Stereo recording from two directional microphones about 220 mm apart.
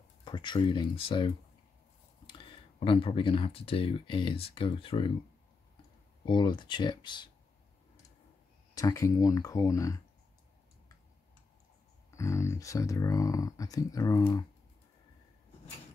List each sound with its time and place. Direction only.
0.2 s speech: 20° left (ahead or behind)
6.2 s speech: 20° left (ahead or behind)
8.7 s speech: 15° left (ahead or behind)
12.1 s speech: 15° left (ahead or behind)